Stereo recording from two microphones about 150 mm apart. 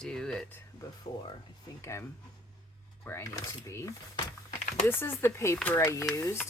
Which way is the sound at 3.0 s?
20° left (ahead or behind).